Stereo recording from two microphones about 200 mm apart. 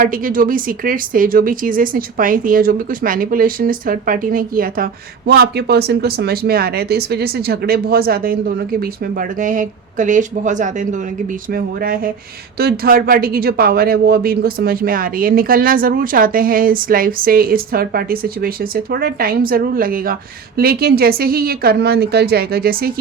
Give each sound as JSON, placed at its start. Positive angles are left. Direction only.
{"t": 0.0, "sound": "a woman's voice", "side_deg": -45}